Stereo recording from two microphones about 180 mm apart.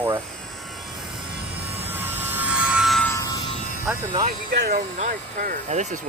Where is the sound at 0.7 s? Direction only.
Centre (ahead or behind).